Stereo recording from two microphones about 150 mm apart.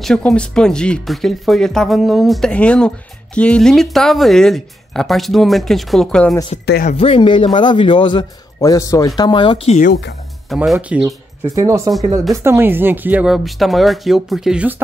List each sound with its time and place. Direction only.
0.0 s speech: 5° left (ahead or behind)
6.6 s speech: 90° left
6.9 s speech: 40° left (ahead or behind)
8.5 s speech: 20° left (ahead or behind); by 9.8 s 35° left (ahead or behind)
9.8 s speech: 65° left (ahead or behind)
10.5 s speech: centre (ahead or behind)
11.1 s speech: 20° right (ahead or behind)